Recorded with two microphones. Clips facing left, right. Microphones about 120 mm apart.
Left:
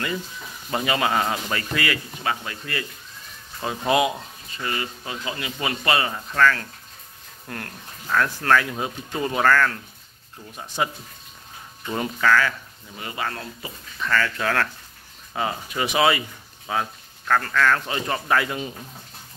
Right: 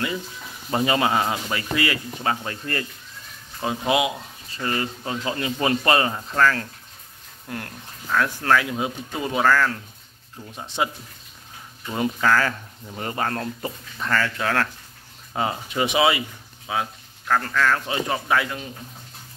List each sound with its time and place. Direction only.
0.7 s speech: 25° right (ahead or behind)
3.6 s speech: 10° right (ahead or behind)
4.6 s speech: 35° right (ahead or behind)
6.1 s speech: 20° right (ahead or behind)
10.8 s speech: 20° right (ahead or behind)
12.0 s speech: 25° right (ahead or behind)
12.4 s speech: 40° right (ahead or behind)
14.1 s speech: 10° right (ahead or behind)
15.3 s speech: 25° right (ahead or behind)
16.0 s speech: 10° right (ahead or behind)